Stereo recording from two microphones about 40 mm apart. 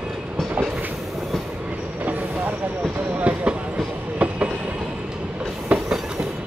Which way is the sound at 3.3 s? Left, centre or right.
Right.